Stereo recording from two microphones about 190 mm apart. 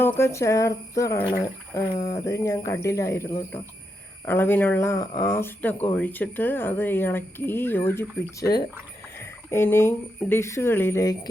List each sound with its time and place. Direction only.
0.0 s speech: 15° left (ahead or behind)